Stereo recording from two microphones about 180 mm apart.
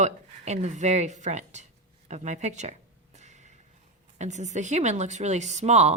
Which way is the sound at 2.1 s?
40° right (ahead or behind).